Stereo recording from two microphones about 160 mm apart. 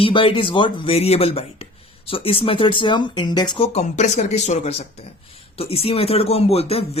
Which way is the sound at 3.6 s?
40° left (ahead or behind).